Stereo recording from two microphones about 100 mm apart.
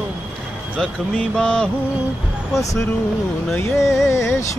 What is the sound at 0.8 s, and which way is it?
Speech, 5° left (ahead or behind).